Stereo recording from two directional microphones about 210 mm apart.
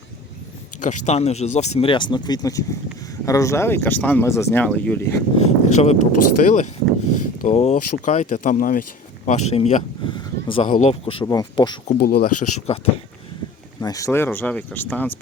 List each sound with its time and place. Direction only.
1.0 s speech: 30° left (ahead or behind); by 5.1 s 10° left (ahead or behind)
5.4 s speech: 35° left (ahead or behind)
10.2 s a sound: 25° left (ahead or behind)
10.7 s speech: 35° left (ahead or behind)
11.9 s speech: 45° left (ahead or behind); by 12.9 s 30° left (ahead or behind)
13.8 s speech: 15° left (ahead or behind)